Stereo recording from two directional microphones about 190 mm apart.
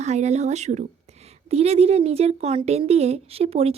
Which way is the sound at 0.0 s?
35° right (ahead or behind).